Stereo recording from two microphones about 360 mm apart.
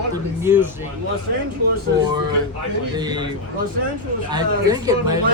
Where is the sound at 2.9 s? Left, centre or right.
Centre.